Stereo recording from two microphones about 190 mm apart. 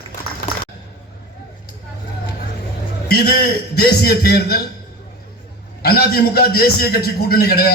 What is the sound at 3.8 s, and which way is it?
Speech, 55° left (ahead or behind).